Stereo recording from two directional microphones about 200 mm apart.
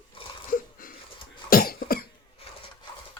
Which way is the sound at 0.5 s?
45° left (ahead or behind).